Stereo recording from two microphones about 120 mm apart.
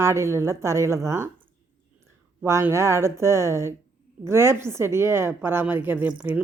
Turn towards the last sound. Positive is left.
turn(degrees=-10)  # may be behind; listen again after turning